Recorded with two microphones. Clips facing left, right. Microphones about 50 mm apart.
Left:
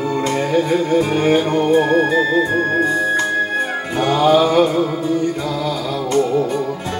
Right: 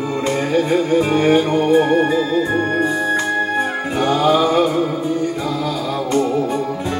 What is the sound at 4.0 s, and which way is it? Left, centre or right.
Music, left.